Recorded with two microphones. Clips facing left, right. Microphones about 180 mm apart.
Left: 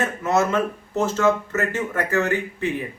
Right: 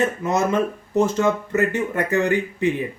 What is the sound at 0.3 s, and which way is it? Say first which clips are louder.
Speech: left 4 dB; 15° right (ahead or behind).